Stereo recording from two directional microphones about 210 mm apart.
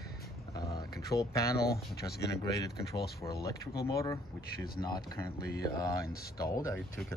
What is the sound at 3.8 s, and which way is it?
Speech, 15° left (ahead or behind).